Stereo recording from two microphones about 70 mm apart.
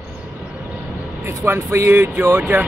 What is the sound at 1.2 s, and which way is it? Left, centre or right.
Speech, right.